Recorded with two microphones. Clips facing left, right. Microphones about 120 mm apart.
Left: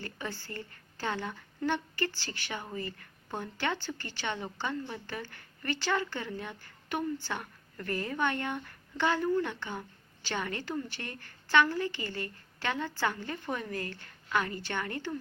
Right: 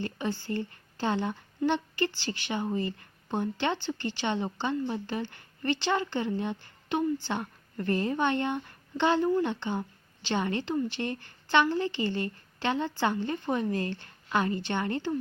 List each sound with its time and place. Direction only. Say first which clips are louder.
0.0 s a woman's voice: right 7 dB; 20° right (ahead or behind)